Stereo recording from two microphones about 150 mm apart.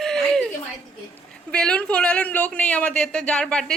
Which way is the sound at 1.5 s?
5° left (ahead or behind).